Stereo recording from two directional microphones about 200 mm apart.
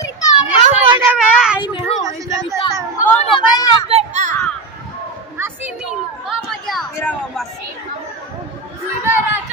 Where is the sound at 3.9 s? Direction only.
30° right (ahead or behind).